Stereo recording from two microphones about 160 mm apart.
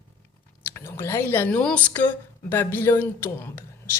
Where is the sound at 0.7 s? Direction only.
15° left (ahead or behind).